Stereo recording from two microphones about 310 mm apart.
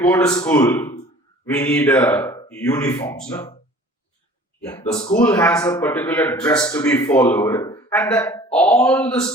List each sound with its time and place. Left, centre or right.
0.0 s a man's voice: centre
4.8 s speech: centre
5.2 s a man's voice: centre